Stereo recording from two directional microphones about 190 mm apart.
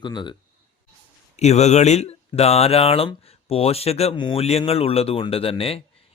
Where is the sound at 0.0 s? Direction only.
25° left (ahead or behind).